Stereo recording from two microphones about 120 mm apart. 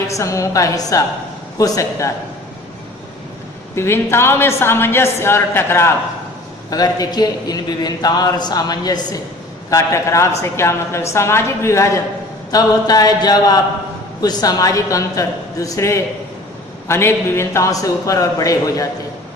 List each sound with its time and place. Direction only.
0.1 s a woman's voice: 25° left (ahead or behind)
3.8 s a woman's voice: 20° left (ahead or behind)
6.7 s a man's voice: 30° left (ahead or behind)